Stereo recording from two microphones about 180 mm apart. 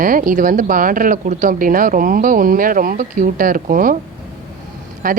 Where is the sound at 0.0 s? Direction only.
50° right (ahead or behind).